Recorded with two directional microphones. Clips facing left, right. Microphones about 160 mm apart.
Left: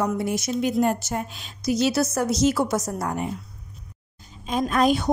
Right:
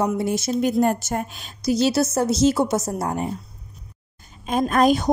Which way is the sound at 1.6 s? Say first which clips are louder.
Right 2 dB; 30° right (ahead or behind).